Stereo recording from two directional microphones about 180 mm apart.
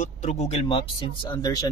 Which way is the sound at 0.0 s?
40° left (ahead or behind).